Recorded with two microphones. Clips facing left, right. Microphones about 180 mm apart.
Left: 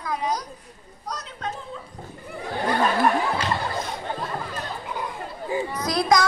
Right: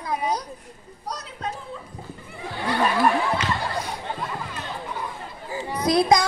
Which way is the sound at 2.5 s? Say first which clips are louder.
Left 3 dB; 45° left (ahead or behind).